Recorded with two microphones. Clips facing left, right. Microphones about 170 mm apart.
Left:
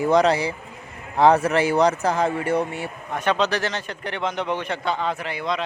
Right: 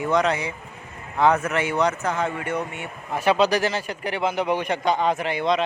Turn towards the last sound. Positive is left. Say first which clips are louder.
# right 4 dB
turn(degrees=-20)  # may be behind; listen again after turning